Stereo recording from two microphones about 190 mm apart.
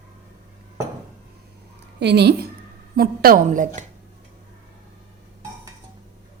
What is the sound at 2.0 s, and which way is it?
Speech, 60° right (ahead or behind).